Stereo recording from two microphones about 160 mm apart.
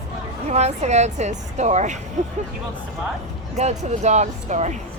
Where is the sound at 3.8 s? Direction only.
45° right (ahead or behind).